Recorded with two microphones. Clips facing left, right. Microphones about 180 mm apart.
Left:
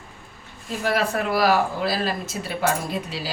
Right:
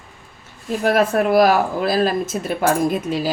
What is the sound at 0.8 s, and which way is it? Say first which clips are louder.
Speech: right 6 dB; 50° right (ahead or behind).